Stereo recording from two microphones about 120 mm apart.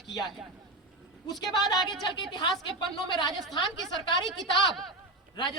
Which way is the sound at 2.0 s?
40° left (ahead or behind).